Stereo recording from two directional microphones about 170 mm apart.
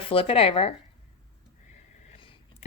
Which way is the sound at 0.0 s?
35° left (ahead or behind).